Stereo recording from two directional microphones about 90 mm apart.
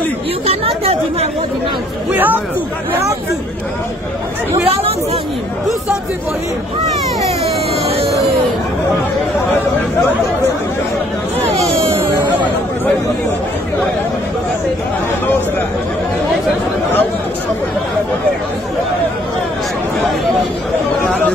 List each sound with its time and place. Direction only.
0.5 s speech: 90° right
2.1 s speech: 20° right (ahead or behind)
4.6 s speech: 90° right